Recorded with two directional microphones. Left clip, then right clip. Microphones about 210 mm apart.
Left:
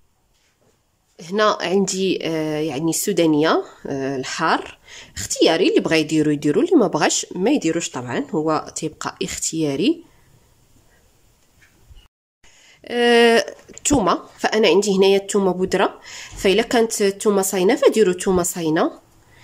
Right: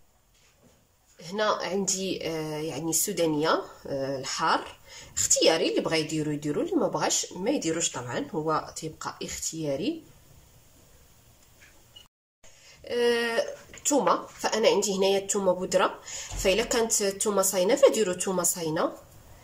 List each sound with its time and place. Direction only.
1.2 s speech: 50° left (ahead or behind)
12.6 s speech: 40° left (ahead or behind)